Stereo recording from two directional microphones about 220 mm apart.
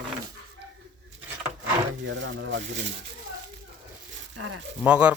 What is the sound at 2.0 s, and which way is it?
Speech, 55° right (ahead or behind).